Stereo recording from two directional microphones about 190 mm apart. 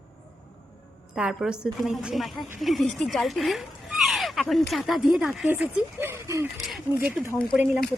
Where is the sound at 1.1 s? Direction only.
5° right (ahead or behind).